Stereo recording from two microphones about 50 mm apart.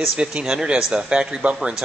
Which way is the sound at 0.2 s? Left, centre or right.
Right.